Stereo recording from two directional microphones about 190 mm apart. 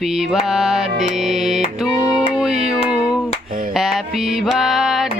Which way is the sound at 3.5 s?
45° right (ahead or behind).